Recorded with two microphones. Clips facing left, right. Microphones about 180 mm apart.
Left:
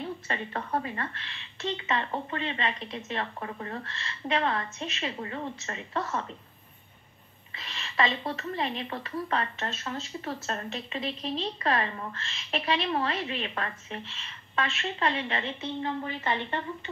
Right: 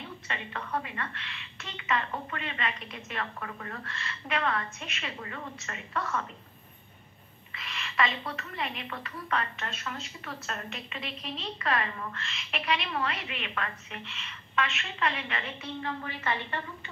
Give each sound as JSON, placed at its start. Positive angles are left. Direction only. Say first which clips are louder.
{"t": 0.0, "sound": "speech", "louder": "left 6 dB", "side_deg": 40}
{"t": 7.5, "sound": "speech", "louder": "left 1 dB", "side_deg": 30}